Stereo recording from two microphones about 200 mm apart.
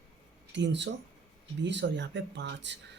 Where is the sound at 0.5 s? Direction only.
60° right (ahead or behind).